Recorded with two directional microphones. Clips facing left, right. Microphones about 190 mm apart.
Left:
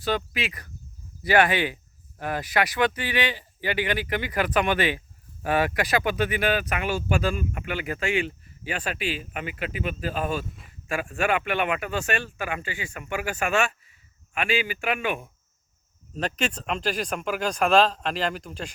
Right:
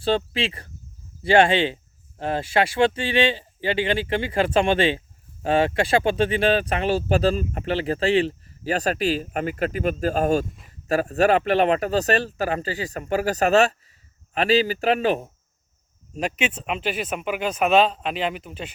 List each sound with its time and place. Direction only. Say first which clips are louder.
0.0 s speech: right 5 dB; 30° right (ahead or behind)
16.1 s speech: right 2 dB; 10° right (ahead or behind)